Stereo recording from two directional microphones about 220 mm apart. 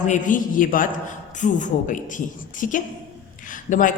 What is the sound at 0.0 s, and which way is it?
A man's voice, 35° left (ahead or behind).